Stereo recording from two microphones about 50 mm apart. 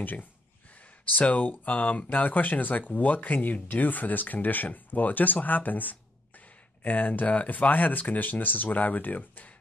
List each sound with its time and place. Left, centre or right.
0.0 s speech: left